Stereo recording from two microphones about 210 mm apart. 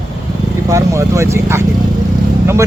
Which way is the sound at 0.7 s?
15° right (ahead or behind).